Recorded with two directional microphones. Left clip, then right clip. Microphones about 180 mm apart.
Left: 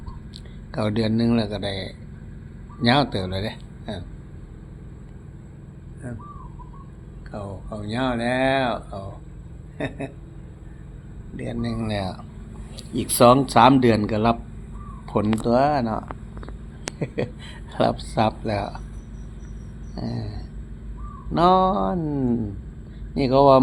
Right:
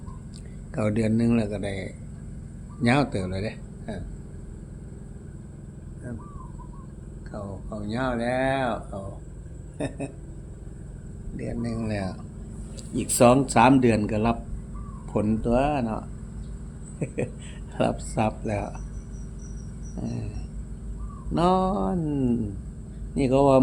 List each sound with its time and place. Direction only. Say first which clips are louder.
0.7 s a man's voice: left 2 dB; 5° right (ahead or behind)
3.9 s speech: left 3 dB; 15° left (ahead or behind)
7.3 s speech: left 3 dB; 40° left (ahead or behind)
9.7 s a sound: left 2 dB; 20° left (ahead or behind)
11.7 s speech: left 3 dB; 10° left (ahead or behind)
17.2 s a man's voice: left 3 dB; 5° left (ahead or behind)
20.0 s speech: left 3 dB; 10° left (ahead or behind)
21.3 s a man's voice: left 6 dB; 5° left (ahead or behind)